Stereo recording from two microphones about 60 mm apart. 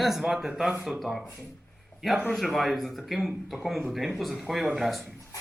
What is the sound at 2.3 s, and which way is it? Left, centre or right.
Speech, centre.